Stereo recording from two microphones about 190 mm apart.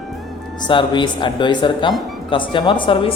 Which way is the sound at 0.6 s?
25° left (ahead or behind).